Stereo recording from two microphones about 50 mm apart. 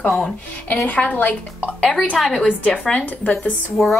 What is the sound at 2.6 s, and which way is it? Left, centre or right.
Speech, left.